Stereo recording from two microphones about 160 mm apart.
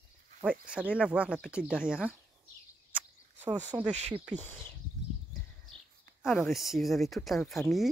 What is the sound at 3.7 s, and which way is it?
Speech, 20° right (ahead or behind).